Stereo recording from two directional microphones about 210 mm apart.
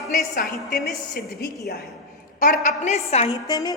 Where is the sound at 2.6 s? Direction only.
35° left (ahead or behind).